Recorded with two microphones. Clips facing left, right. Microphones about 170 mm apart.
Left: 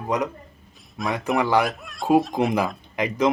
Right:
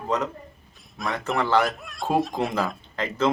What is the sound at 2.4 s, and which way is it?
Speech, 15° left (ahead or behind).